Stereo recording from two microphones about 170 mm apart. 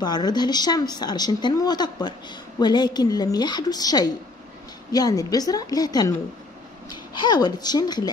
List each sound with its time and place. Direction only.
0.0 s speech: 25° left (ahead or behind)